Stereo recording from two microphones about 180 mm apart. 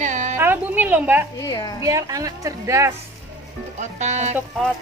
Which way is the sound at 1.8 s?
20° right (ahead or behind).